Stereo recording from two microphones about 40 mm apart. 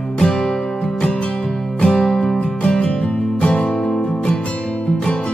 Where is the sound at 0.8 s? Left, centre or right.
Left.